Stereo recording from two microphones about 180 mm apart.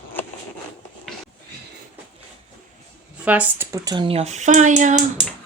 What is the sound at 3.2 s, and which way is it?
Speech, 10° right (ahead or behind).